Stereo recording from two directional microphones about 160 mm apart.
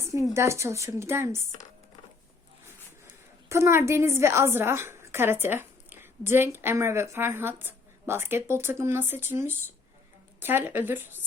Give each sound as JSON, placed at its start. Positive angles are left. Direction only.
{"t": 0.3, "sound": "a woman's voice", "side_deg": -15}
{"t": 3.5, "sound": "a woman's voice", "side_deg": -15}